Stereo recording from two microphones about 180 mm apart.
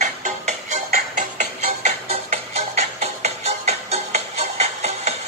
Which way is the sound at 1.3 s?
40° right (ahead or behind).